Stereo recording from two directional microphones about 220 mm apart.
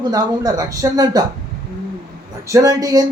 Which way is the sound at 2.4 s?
15° right (ahead or behind).